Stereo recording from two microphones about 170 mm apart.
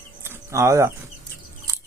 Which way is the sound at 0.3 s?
15° right (ahead or behind).